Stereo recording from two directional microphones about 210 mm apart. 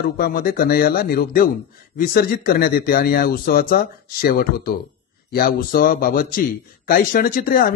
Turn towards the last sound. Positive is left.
turn(degrees=45)  # may be behind; listen again after turning